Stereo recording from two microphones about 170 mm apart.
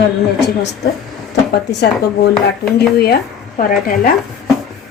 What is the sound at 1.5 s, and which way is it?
Speech, 75° left (ahead or behind).